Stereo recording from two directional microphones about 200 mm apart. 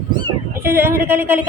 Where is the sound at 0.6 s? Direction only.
10° right (ahead or behind).